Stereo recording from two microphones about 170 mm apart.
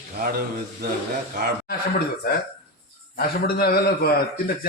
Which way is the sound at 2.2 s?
65° left (ahead or behind).